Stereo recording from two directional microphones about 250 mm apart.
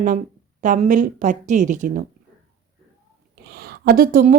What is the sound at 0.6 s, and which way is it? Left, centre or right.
A woman's voice, right.